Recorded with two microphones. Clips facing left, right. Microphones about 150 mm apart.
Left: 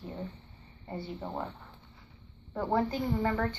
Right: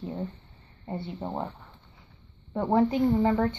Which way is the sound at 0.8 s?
25° right (ahead or behind).